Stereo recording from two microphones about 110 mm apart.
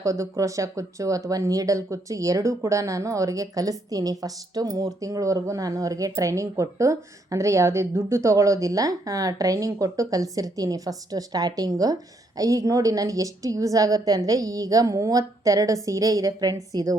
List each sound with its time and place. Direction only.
0.0 s speech: 30° right (ahead or behind)